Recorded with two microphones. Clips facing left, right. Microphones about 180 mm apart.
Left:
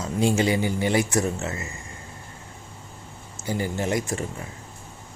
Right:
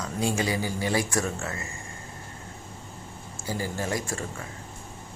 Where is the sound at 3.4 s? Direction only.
20° left (ahead or behind).